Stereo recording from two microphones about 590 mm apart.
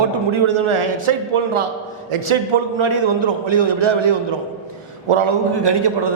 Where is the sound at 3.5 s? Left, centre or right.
Right.